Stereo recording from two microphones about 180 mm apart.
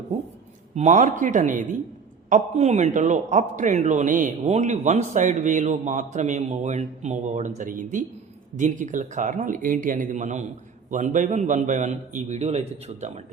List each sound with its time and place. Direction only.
0.8 s a man's voice: 40° right (ahead or behind)